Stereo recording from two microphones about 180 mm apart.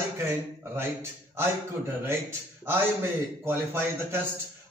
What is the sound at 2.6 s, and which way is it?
A man's voice, 15° right (ahead or behind).